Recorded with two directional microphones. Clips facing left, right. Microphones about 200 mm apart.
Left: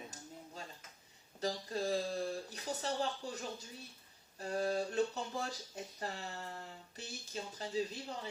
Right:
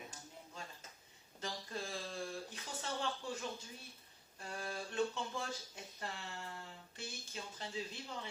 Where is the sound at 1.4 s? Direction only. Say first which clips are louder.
Left 7 dB; 40° left (ahead or behind).